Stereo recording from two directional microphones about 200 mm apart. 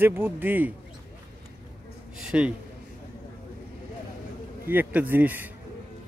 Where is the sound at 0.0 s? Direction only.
10° right (ahead or behind).